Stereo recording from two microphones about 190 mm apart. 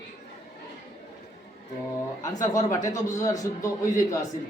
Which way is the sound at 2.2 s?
20° left (ahead or behind).